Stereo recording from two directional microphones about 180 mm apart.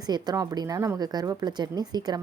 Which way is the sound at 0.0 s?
20° right (ahead or behind).